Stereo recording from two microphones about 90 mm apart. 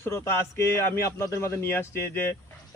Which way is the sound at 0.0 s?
30° left (ahead or behind).